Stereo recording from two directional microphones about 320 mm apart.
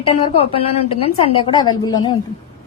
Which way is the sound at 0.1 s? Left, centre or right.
Centre.